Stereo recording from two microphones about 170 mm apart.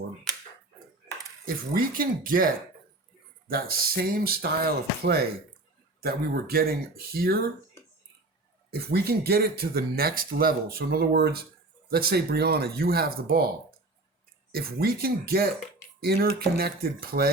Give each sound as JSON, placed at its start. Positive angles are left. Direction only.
{"t": 1.5, "sound": "speech", "side_deg": -55}
{"t": 8.7, "sound": "speech", "side_deg": -70}